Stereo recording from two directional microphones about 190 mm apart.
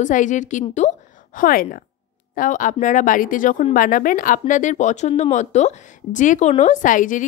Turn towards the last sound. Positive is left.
turn(degrees=45)  # may be behind; listen again after turning